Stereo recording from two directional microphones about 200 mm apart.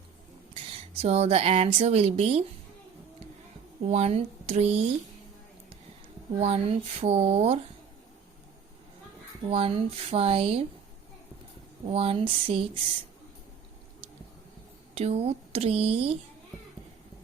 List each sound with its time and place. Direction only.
1.0 s speech: 30° right (ahead or behind)
3.8 s speech: 30° right (ahead or behind)
6.4 s speech: 30° right (ahead or behind)
9.5 s speech: 30° right (ahead or behind)
11.9 s speech: 30° right (ahead or behind)
14.9 s speech: 30° right (ahead or behind)